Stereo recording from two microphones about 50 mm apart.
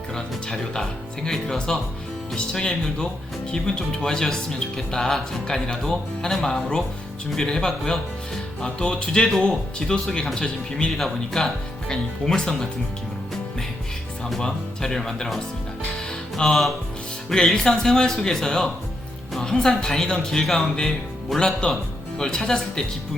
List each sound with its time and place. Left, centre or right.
0.1 s speech: centre
14.3 s speech: centre
16.0 s music: centre
17.2 s a woman's voice: centre